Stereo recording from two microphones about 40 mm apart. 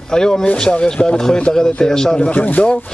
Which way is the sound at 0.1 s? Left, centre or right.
Centre.